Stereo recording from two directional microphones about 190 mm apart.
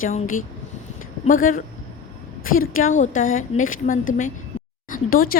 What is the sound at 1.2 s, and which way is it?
Speech, 45° left (ahead or behind).